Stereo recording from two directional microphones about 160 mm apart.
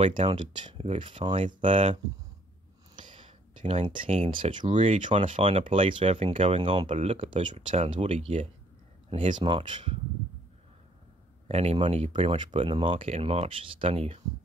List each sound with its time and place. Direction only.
0.0 s speech: 35° right (ahead or behind)
1.3 s speech: 50° right (ahead or behind)
1.6 s speech: 35° right (ahead or behind)
3.0 s speech: 30° right (ahead or behind)
4.7 s speech: 50° right (ahead or behind)
5.1 s speech: 35° right (ahead or behind)
9.4 s speech: 30° right (ahead or behind)
11.4 s speech: 40° right (ahead or behind)